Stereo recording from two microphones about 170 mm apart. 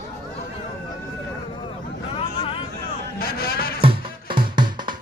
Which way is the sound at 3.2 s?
60° left (ahead or behind).